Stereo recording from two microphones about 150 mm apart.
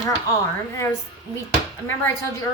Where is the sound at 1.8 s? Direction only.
15° left (ahead or behind).